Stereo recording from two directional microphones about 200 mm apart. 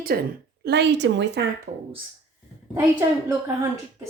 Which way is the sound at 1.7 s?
40° right (ahead or behind).